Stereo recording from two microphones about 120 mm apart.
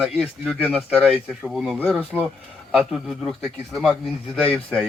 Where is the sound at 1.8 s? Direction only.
10° left (ahead or behind).